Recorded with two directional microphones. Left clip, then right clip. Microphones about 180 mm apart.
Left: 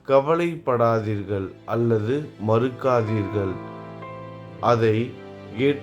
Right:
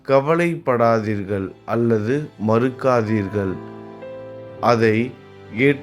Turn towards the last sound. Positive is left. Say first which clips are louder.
# right 4 dB
turn(degrees=-15)  # may be behind; listen again after turning